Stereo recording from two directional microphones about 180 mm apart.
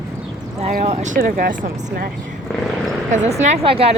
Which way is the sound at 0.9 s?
45° right (ahead or behind).